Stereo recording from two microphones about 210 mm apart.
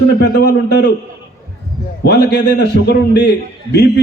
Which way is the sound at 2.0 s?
50° left (ahead or behind).